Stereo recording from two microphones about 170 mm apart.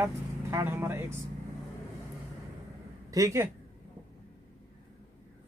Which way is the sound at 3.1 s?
20° right (ahead or behind).